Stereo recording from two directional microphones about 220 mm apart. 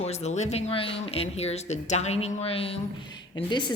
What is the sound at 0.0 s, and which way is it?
A woman's voice, 30° left (ahead or behind).